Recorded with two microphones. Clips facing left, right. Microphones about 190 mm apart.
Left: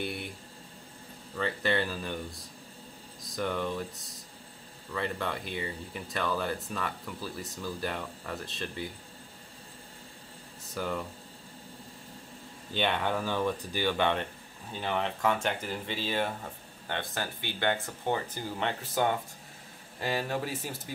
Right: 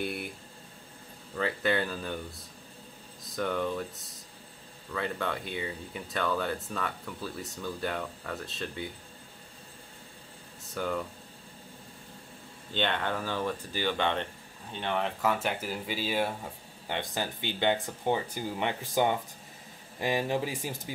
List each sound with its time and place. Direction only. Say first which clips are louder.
0.0 s a sound: right 1 dB; centre (ahead or behind)
1.3 s speech: right 1 dB; centre (ahead or behind)
3.3 s speech: right 1 dB; centre (ahead or behind)
4.9 s speech: right 1 dB; centre (ahead or behind)
10.7 s speech: right 1 dB; centre (ahead or behind)
12.7 s speech: left 1 dB; 10° left (ahead or behind)
14.7 s speech: even; centre (ahead or behind); by 20.9 s 15° right (ahead or behind)